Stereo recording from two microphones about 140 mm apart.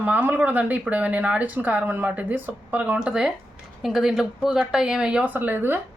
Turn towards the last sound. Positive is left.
turn(degrees=-15)  # may be behind; listen again after turning